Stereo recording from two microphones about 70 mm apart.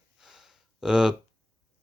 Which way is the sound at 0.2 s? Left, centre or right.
Centre.